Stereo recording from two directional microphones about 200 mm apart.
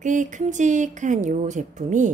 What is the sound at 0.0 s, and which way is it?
A woman's voice, 40° right (ahead or behind).